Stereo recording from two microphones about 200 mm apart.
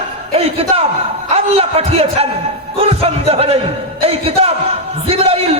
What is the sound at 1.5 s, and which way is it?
A man's voice, 30° right (ahead or behind).